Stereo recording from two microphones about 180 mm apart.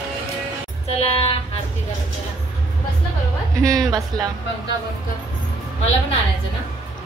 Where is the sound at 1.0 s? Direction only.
35° left (ahead or behind).